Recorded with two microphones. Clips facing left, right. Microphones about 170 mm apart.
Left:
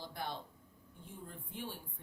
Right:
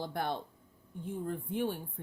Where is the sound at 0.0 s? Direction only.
60° right (ahead or behind).